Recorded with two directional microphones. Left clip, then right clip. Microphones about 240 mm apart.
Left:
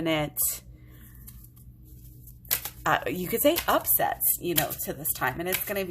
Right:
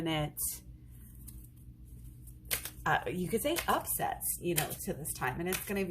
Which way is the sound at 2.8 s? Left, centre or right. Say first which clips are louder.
Left 6 dB; left.